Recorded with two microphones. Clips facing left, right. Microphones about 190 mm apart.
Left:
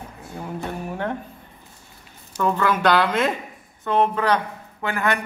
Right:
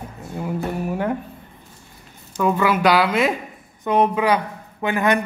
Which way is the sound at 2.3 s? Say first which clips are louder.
Right 2 dB; 10° right (ahead or behind).